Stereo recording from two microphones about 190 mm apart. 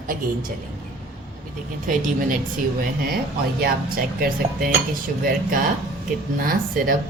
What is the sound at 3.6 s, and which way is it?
Dishes, 50° right (ahead or behind).